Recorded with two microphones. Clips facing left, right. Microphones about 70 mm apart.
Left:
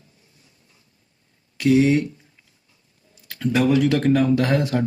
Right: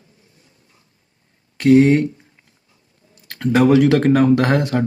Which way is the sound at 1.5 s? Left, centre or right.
Right.